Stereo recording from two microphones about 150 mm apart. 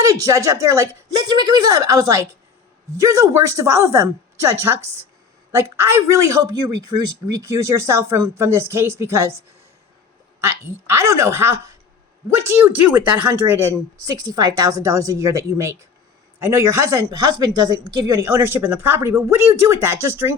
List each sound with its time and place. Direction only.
0.0 s a man's voice: 20° right (ahead or behind)
10.4 s a man's voice: 15° right (ahead or behind)